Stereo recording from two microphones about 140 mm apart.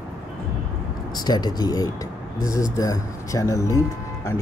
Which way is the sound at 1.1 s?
30° left (ahead or behind).